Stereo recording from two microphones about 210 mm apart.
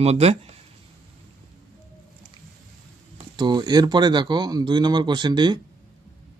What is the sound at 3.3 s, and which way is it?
Speech, 20° right (ahead or behind).